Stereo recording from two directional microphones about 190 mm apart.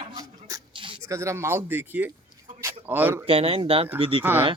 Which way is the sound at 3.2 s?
30° right (ahead or behind).